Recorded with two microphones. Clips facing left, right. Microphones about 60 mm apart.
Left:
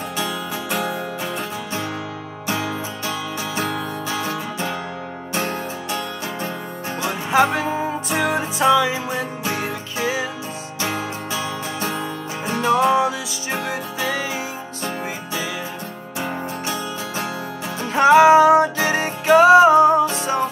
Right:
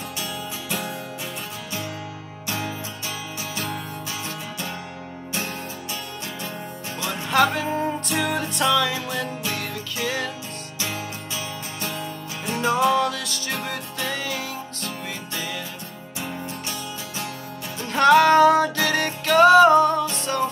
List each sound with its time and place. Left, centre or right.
0.8 s music: left
2.4 s music: left
7.0 s music: centre
8.7 s music: left
11.8 s music: left
12.7 s music: centre
16.2 s music: left
17.9 s music: centre